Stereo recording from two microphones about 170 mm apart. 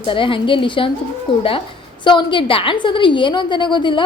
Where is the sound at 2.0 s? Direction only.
30° left (ahead or behind).